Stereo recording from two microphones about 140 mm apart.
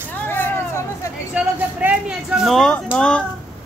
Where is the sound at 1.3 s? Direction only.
10° right (ahead or behind); by 3.2 s 10° left (ahead or behind).